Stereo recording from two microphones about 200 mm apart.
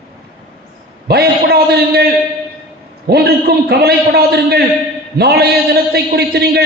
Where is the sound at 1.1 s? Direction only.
50° right (ahead or behind).